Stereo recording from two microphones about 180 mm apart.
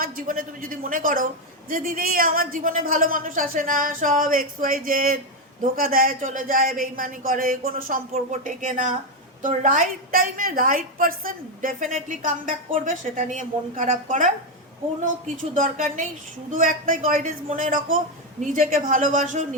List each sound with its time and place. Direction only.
0.0 s a woman's voice: 50° right (ahead or behind)
15.5 s a woman's voice: 45° right (ahead or behind)